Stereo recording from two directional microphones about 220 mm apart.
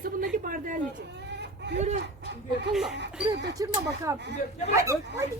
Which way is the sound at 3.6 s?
15° right (ahead or behind).